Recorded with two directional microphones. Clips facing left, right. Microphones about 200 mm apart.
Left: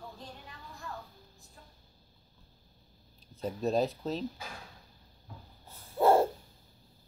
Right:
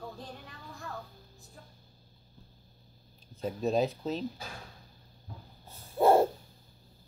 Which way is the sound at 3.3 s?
Centre (ahead or behind).